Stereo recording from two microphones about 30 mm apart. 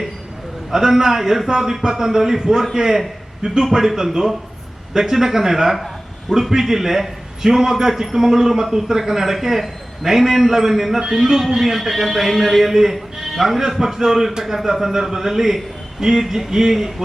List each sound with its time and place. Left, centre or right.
0.7 s a man's voice: centre